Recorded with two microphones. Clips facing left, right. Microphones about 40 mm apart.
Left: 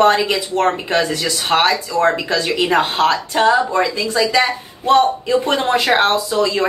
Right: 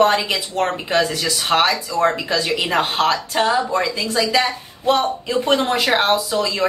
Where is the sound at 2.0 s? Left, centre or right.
Centre.